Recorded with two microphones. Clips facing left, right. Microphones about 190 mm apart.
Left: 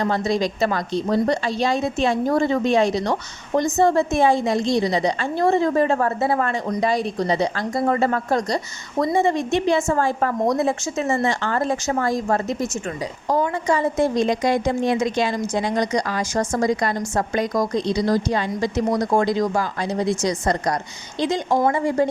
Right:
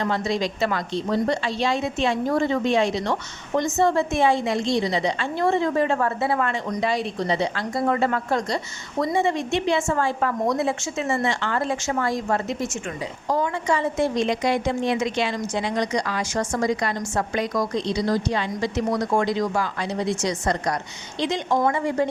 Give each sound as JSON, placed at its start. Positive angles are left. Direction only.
{"t": 0.0, "sound": "a woman's voice", "side_deg": 40}